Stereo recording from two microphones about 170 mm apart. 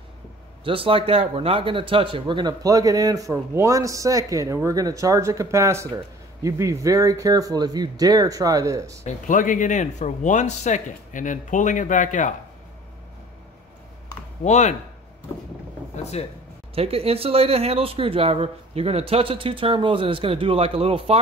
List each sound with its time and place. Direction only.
0.7 s speech: 30° right (ahead or behind)
9.0 s speech: 50° left (ahead or behind)
14.4 s speech: 45° left (ahead or behind)
16.0 s speech: 40° left (ahead or behind)
16.7 s speech: 35° right (ahead or behind)